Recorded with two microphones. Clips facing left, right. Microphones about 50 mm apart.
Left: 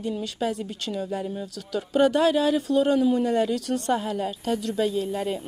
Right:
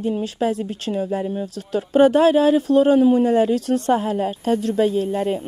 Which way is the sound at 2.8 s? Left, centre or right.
Right.